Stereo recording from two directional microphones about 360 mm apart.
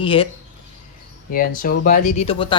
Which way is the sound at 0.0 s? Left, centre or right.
Centre.